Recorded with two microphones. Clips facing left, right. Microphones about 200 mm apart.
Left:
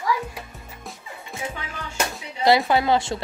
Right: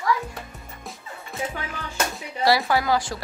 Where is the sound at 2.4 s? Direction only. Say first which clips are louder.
Left 3 dB; 20° left (ahead or behind).